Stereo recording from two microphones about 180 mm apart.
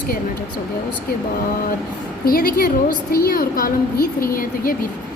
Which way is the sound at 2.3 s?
55° left (ahead or behind).